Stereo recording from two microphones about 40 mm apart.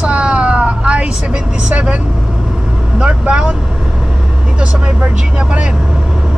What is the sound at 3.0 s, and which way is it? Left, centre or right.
Speech, right.